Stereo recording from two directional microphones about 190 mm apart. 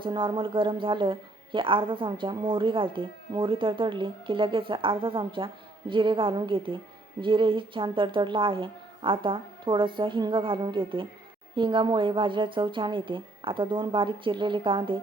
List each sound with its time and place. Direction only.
0.0 s a woman's voice: 25° right (ahead or behind)